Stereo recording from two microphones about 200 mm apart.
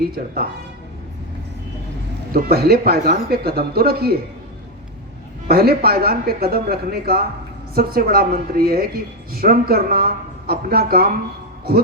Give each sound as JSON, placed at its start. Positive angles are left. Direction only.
{"t": 2.3, "sound": "speech", "side_deg": -50}
{"t": 5.5, "sound": "speech", "side_deg": -50}